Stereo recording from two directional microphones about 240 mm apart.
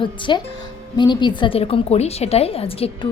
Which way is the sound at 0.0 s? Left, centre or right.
Centre.